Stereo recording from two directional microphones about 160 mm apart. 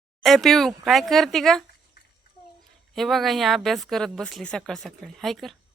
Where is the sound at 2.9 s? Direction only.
Centre (ahead or behind).